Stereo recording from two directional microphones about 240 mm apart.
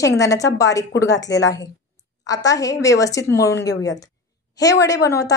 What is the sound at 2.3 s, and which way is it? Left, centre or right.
A woman's voice, centre.